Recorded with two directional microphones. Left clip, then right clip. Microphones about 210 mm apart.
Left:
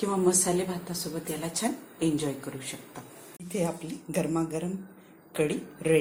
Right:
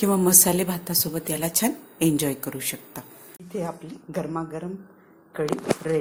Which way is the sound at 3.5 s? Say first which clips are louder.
Even; 10° left (ahead or behind).